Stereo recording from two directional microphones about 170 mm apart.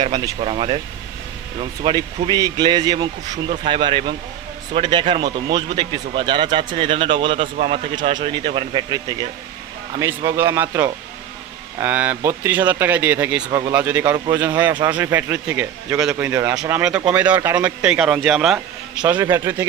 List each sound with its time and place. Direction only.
0.0 s speech: 25° right (ahead or behind)
1.8 s speech: 25° right (ahead or behind); by 13.4 s 10° right (ahead or behind)
13.5 s speech: 20° right (ahead or behind)
13.7 s speech: 10° right (ahead or behind)
14.7 s speech: 25° right (ahead or behind)
14.9 s a man's voice: 15° right (ahead or behind)
19.0 s speech: 15° right (ahead or behind)